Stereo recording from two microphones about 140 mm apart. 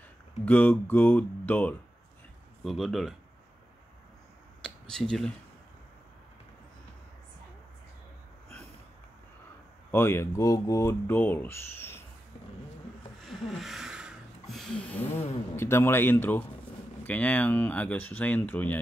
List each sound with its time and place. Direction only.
0.5 s speech: 10° left (ahead or behind)
2.6 s speech: centre (ahead or behind)
4.6 s a sound: 5° left (ahead or behind)
9.8 s speech: 15° left (ahead or behind)
13.2 s a sound: centre (ahead or behind)
15.1 s speech: 15° left (ahead or behind)